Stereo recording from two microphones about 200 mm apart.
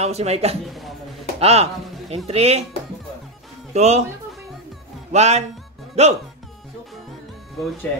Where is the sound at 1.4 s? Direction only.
30° right (ahead or behind).